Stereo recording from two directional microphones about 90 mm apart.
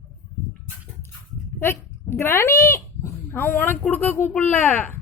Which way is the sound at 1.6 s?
25° left (ahead or behind).